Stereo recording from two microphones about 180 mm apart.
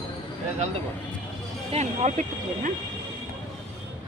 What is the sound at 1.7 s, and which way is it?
Speech, 40° right (ahead or behind).